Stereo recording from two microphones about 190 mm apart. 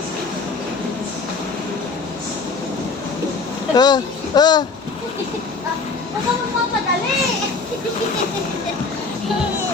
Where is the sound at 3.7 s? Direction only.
20° left (ahead or behind).